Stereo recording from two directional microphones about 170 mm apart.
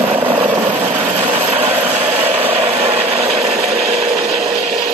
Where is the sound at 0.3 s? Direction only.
45° right (ahead or behind).